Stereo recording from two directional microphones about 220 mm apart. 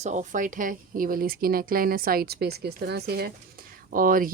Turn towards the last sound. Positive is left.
turn(degrees=-40)  # may be behind; listen again after turning